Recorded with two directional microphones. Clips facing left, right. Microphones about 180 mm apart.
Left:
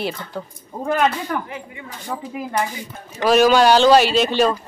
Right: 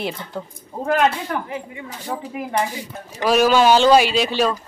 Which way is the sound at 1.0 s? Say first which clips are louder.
Even; centre (ahead or behind).